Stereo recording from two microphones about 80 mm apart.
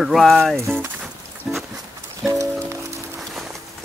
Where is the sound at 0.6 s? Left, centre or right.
Right.